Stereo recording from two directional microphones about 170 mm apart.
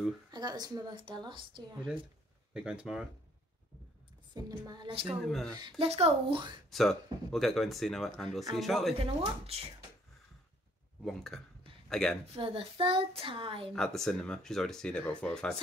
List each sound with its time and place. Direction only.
0.3 s a woman's voice: 25° right (ahead or behind)
2.5 s speech: 5° right (ahead or behind)
4.3 s a woman's voice: 25° right (ahead or behind)
5.0 s speech: centre (ahead or behind)
5.8 s a child's voice: 35° right (ahead or behind)
6.7 s speech: centre (ahead or behind)
8.9 s a child's voice: 35° right (ahead or behind)
11.1 s speech: centre (ahead or behind)
12.4 s a child's voice: 35° right (ahead or behind)
13.7 s speech: 5° left (ahead or behind)